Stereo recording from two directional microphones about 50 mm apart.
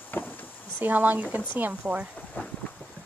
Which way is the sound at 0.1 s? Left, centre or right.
Left.